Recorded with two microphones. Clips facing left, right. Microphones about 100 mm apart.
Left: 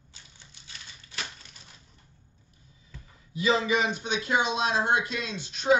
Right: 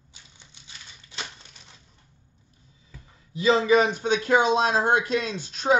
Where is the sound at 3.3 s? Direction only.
30° right (ahead or behind).